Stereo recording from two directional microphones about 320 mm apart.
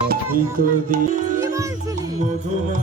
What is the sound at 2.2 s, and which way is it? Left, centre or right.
Music, right.